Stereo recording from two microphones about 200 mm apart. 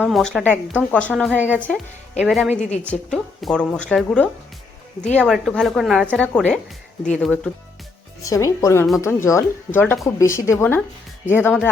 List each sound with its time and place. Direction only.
0.0 s speech: centre (ahead or behind)
8.2 s speech: 15° left (ahead or behind)